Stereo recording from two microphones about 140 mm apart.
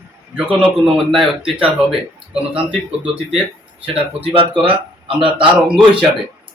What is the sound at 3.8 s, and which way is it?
Speech, 45° right (ahead or behind).